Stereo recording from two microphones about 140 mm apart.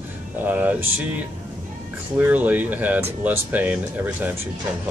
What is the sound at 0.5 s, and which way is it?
Speech, 10° right (ahead or behind).